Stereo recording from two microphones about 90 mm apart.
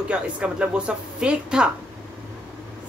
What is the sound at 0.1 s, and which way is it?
A man's voice, 10° right (ahead or behind).